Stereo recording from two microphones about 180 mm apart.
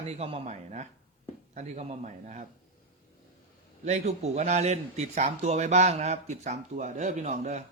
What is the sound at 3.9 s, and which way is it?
A man's voice, 40° right (ahead or behind).